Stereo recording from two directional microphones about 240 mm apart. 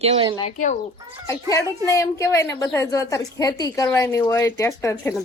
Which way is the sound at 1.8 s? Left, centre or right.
Centre.